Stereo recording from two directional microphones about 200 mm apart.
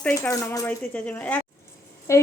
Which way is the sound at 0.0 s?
15° left (ahead or behind).